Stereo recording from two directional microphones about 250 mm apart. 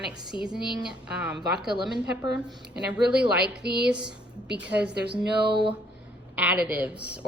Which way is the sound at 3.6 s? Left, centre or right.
Right.